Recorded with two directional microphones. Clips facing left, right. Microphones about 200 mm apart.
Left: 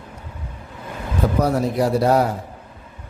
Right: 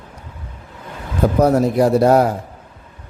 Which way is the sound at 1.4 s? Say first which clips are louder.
Right 7 dB; 50° right (ahead or behind).